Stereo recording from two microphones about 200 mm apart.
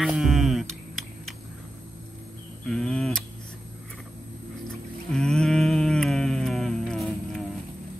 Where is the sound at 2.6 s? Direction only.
Centre (ahead or behind).